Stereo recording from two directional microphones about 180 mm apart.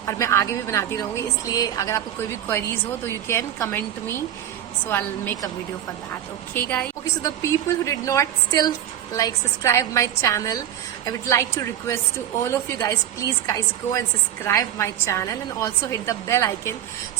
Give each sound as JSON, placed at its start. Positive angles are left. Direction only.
{"t": 0.0, "sound": "a woman's voice", "side_deg": 15}
{"t": 4.9, "sound": "a woman's voice", "side_deg": 15}
{"t": 6.5, "sound": "a woman's voice", "side_deg": 10}